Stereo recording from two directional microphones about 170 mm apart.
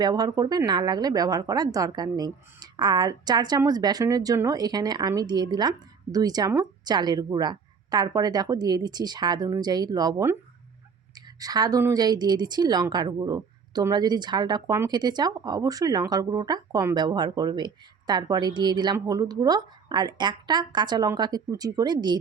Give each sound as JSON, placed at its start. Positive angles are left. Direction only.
{"t": 0.0, "sound": "speech", "side_deg": -25}
{"t": 11.3, "sound": "speech", "side_deg": -20}